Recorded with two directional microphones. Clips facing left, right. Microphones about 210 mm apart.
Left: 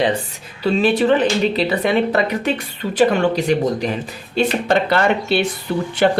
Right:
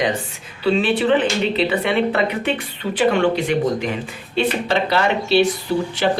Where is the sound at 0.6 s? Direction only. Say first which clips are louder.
Left 2 dB; 40° left (ahead or behind).